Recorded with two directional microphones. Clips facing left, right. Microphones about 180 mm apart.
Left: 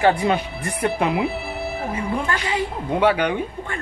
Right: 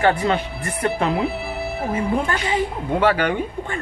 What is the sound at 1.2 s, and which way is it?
Music, centre (ahead or behind).